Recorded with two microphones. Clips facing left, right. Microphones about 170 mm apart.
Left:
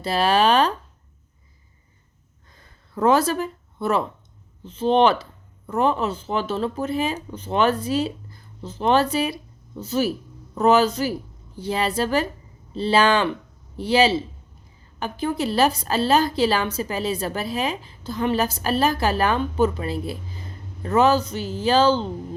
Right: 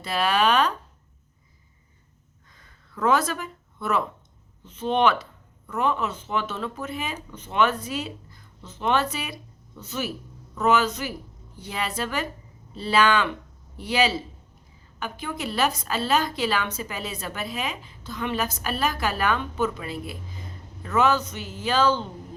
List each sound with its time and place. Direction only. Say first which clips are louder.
0.0 s speech: left 4 dB; 30° left (ahead or behind)
2.5 s a sound: left 5 dB; 35° left (ahead or behind)
4.6 s speech: left 4 dB; 30° left (ahead or behind)